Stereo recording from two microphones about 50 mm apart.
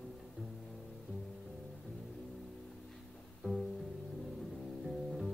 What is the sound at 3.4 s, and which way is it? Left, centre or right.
Music, centre.